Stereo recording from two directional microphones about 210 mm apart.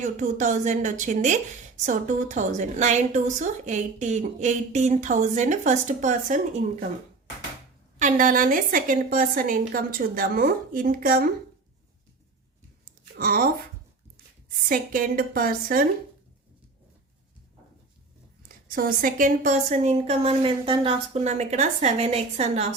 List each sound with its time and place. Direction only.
0.0 s a woman's voice: 35° right (ahead or behind)
7.9 s a woman's voice: 35° right (ahead or behind)
13.1 s a woman's voice: 45° right (ahead or behind)
14.7 s a woman's voice: 40° right (ahead or behind)
18.4 s a woman's voice: 45° right (ahead or behind)